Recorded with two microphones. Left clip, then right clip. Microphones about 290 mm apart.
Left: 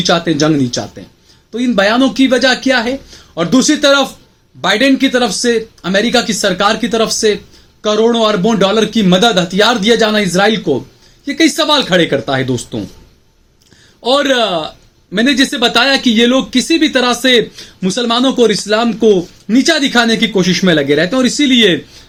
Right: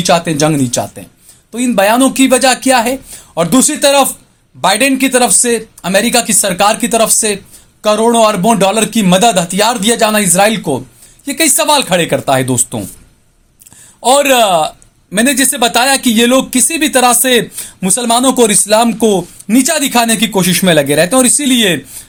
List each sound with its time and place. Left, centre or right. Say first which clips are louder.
0.0 s speech: right 1 dB; right
14.0 s speech: right 3 dB; right